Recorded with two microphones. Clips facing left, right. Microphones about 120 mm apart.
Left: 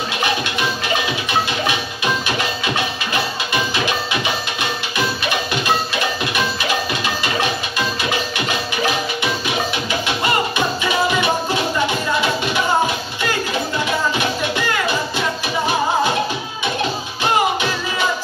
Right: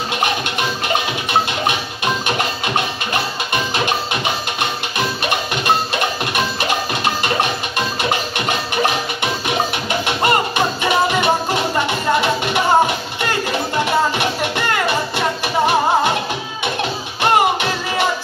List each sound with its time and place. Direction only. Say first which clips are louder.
0.2 s music: even; 50° right (ahead or behind)
2.2 s music: right 1 dB; 50° right (ahead or behind)
17.2 s music: right 3 dB; 55° right (ahead or behind)